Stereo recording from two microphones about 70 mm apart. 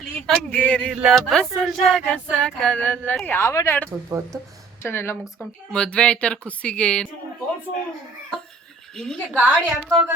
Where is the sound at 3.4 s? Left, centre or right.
Left.